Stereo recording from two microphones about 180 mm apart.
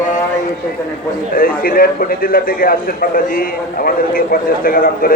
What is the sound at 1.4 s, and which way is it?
A man's voice, 55° left (ahead or behind).